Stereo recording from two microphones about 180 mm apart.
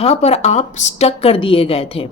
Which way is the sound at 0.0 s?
35° left (ahead or behind).